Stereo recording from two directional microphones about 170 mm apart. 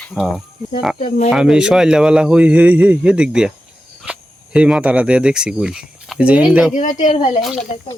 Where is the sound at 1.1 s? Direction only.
45° left (ahead or behind).